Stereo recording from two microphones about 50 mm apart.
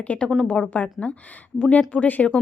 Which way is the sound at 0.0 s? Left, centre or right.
Left.